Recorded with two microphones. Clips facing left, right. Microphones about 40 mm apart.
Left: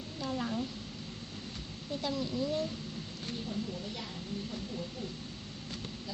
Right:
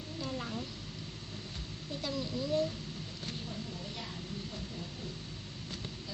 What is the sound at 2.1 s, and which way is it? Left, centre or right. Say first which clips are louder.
Speech: right 2 dB; left.